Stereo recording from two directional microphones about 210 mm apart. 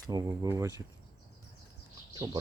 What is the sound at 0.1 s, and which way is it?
Speech, 15° right (ahead or behind).